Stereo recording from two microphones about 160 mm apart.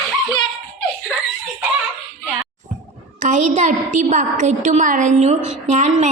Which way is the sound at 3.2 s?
50° right (ahead or behind).